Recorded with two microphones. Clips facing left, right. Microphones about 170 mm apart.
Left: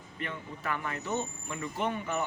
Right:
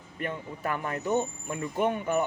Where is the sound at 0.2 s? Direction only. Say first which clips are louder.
Right 5 dB; 45° right (ahead or behind).